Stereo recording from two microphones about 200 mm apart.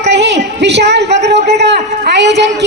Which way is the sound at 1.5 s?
55° right (ahead or behind).